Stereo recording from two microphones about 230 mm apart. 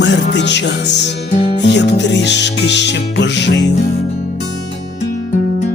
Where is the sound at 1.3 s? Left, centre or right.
Left.